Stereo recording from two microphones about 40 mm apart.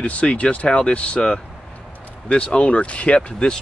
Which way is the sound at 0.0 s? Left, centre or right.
Left.